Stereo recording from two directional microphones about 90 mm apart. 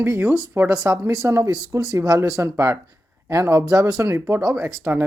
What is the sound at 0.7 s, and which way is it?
Speech, 30° right (ahead or behind).